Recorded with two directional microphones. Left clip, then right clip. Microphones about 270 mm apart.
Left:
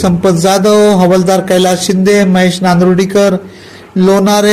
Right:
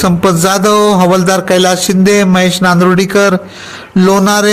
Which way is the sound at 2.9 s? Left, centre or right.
Right.